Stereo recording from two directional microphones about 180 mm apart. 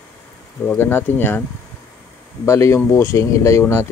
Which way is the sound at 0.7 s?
10° left (ahead or behind).